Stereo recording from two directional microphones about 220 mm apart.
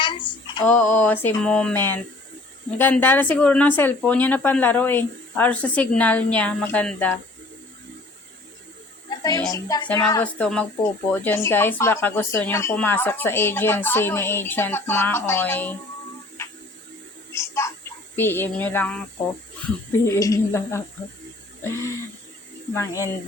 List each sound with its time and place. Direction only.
0.0 s female singing: 20° left (ahead or behind)
0.6 s speech: 5° left (ahead or behind)
9.0 s a sound: 15° left (ahead or behind)
9.5 s speech: 15° left (ahead or behind)
17.3 s a sound: 15° left (ahead or behind)
18.2 s speech: 10° left (ahead or behind)
20.1 s speech: 15° left (ahead or behind)
22.7 s speech: 10° left (ahead or behind)